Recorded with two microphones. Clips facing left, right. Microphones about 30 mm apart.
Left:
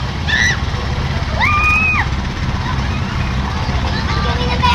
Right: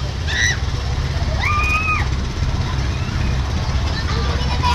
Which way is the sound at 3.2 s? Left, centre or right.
Left.